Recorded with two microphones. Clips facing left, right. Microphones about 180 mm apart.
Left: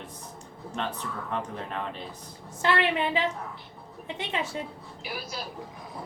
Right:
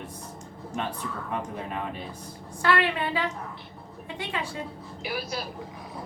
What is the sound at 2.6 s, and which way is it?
Speech, 20° left (ahead or behind).